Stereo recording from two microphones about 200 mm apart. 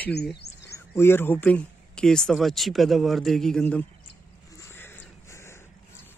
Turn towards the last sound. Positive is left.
turn(degrees=15)  # may be behind; listen again after turning